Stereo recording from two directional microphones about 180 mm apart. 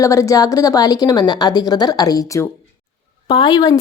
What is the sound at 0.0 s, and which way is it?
A woman's voice, 15° left (ahead or behind).